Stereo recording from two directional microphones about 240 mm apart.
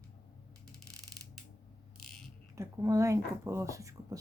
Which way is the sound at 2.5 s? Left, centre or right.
Centre.